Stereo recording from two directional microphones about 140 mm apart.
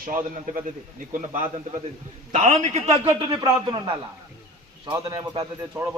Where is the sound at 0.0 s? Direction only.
65° right (ahead or behind).